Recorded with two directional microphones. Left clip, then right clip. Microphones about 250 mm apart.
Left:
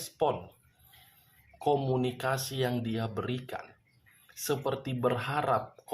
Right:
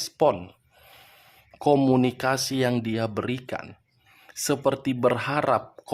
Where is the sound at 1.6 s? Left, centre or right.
Right.